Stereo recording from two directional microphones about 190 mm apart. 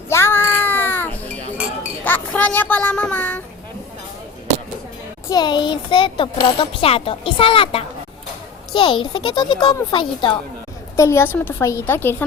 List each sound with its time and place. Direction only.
0.1 s child singing: 10° left (ahead or behind)
2.0 s a sound: 10° left (ahead or behind)
5.3 s speech: 20° left (ahead or behind)
10.9 s a woman's voice: 15° left (ahead or behind)